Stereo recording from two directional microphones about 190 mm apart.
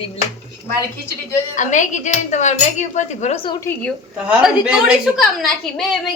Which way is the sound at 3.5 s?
15° left (ahead or behind).